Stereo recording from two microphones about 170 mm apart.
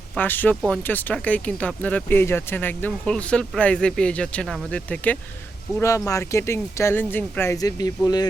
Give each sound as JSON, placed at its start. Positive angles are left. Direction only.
{"t": 0.2, "sound": "speech", "side_deg": 10}